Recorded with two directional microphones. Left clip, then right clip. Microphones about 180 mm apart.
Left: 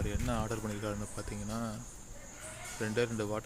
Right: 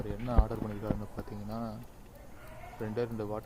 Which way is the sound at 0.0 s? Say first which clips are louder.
Right 1 dB; 15° left (ahead or behind).